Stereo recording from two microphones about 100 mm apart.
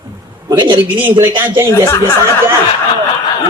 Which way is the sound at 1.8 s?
25° left (ahead or behind).